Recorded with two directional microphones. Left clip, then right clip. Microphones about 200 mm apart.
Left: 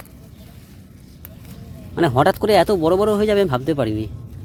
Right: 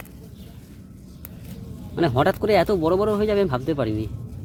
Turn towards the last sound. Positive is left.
turn(degrees=15)  # may be behind; listen again after turning